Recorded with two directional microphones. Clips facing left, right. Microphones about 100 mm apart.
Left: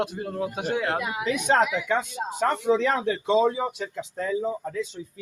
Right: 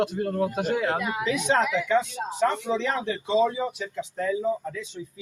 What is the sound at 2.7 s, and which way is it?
Speech, 50° left (ahead or behind).